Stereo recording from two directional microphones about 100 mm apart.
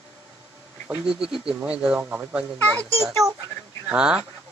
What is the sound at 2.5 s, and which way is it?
Speech, 20° left (ahead or behind).